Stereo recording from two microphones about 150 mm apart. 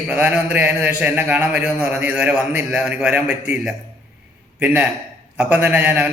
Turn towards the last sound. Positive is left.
turn(degrees=-10)  # may be behind; listen again after turning